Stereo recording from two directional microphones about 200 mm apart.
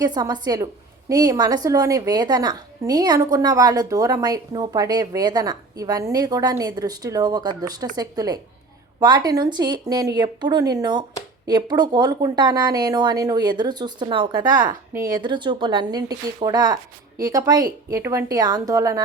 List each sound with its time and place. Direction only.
0.0 s a woman's voice: 20° right (ahead or behind)